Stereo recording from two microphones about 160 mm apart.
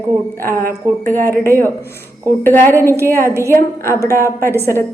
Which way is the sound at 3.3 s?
15° right (ahead or behind).